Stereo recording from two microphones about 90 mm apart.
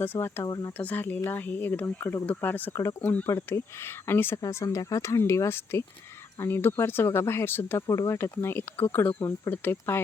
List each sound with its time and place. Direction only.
0.0 s speech: 25° left (ahead or behind)
0.4 s speech: 45° left (ahead or behind)
0.8 s speech: 20° left (ahead or behind)
4.4 s speech: 40° left (ahead or behind)
7.9 s speech: 35° left (ahead or behind)